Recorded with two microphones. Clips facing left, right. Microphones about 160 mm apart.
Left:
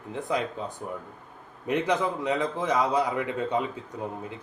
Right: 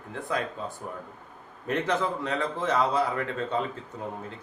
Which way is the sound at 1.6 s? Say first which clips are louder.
Left 2 dB; 15° left (ahead or behind).